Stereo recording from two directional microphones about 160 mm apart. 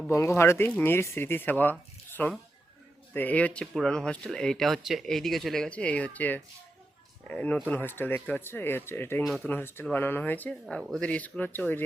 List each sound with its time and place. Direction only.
0.1 s speech: 15° left (ahead or behind)
9.2 s speech: centre (ahead or behind)
9.5 s speech: 15° left (ahead or behind)